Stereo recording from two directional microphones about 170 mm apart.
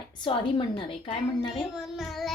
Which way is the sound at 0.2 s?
30° left (ahead or behind).